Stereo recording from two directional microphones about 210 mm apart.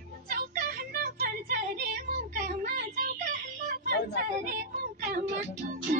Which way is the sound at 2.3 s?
40° right (ahead or behind).